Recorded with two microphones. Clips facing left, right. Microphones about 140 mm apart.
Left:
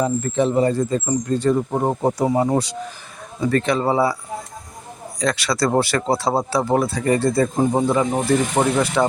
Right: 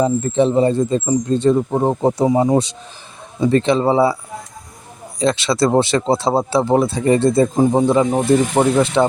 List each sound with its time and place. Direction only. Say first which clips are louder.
0.0 s speech: right 4 dB; 25° right (ahead or behind)
5.2 s speech: right 4 dB; 25° right (ahead or behind)
7.5 s speech: right 4 dB; 10° right (ahead or behind)
8.6 s speech: right 4 dB; 10° right (ahead or behind)